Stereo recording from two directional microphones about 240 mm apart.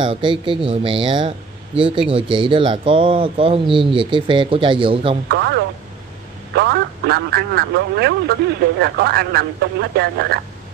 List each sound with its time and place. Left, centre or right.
0.0 s speech: right
5.3 s speech: right